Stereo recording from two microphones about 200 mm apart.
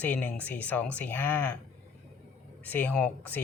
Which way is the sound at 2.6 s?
5° left (ahead or behind).